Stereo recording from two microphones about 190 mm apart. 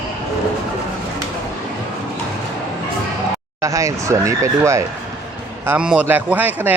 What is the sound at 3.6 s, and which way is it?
Speech, 15° right (ahead or behind).